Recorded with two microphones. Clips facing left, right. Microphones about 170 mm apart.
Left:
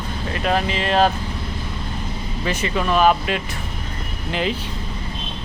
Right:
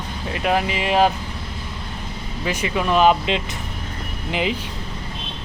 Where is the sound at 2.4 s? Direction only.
10° right (ahead or behind).